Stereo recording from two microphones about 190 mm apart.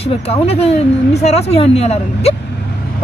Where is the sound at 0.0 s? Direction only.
30° left (ahead or behind).